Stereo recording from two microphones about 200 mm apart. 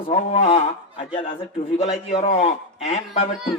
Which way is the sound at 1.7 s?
35° left (ahead or behind).